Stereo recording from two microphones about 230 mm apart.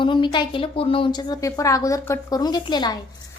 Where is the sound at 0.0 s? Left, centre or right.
Left.